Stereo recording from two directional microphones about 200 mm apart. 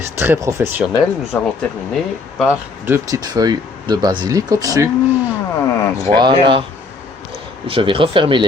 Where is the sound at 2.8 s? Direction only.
15° right (ahead or behind).